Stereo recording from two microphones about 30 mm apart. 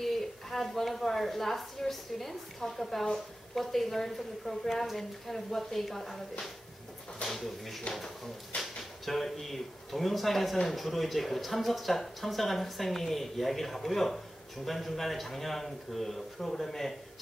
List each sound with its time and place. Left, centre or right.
0.0 s a woman's voice: centre
7.3 s speech: centre
8.5 s a sound: left
9.0 s speech: centre